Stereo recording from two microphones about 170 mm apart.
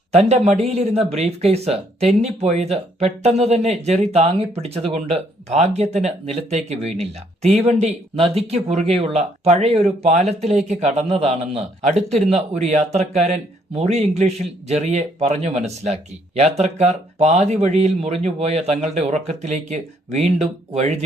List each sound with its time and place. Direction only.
0.1 s speech: 40° right (ahead or behind)